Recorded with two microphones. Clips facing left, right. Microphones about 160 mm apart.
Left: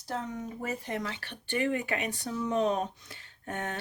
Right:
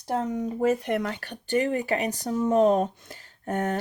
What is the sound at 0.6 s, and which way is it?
Speech, 80° right.